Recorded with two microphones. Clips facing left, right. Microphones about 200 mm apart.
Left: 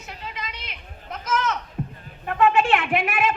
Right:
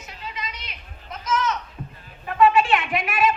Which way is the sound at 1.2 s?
60° left (ahead or behind).